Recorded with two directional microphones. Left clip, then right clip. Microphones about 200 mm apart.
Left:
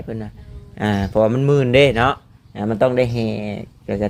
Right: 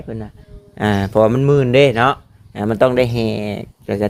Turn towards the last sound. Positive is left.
turn(degrees=-30)  # may be behind; listen again after turning